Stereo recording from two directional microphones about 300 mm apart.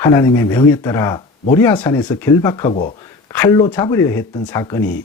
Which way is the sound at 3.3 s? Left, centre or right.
Centre.